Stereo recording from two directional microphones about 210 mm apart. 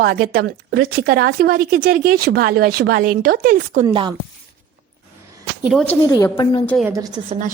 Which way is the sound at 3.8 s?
20° right (ahead or behind).